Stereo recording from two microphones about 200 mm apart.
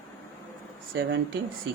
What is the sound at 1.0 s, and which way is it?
Speech, 65° right (ahead or behind).